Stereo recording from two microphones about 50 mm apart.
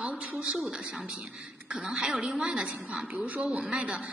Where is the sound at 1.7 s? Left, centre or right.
Centre.